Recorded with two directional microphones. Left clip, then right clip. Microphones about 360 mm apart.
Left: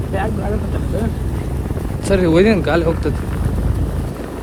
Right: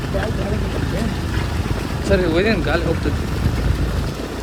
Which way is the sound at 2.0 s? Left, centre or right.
Centre.